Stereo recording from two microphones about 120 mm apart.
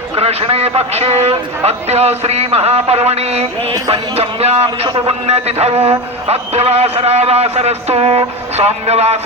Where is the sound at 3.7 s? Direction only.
35° right (ahead or behind).